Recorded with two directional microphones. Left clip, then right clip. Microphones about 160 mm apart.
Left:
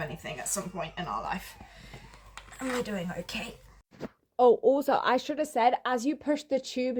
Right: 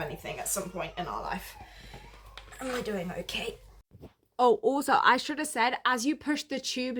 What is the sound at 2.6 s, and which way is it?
Speech, 10° right (ahead or behind).